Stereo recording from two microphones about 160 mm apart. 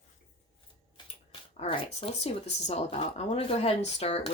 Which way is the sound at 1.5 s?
35° left (ahead or behind).